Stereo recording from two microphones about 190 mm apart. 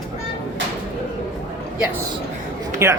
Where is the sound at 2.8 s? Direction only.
15° right (ahead or behind).